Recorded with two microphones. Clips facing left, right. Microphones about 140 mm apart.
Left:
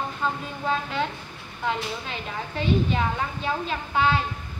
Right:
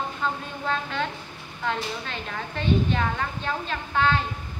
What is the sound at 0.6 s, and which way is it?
A woman's voice, 5° left (ahead or behind).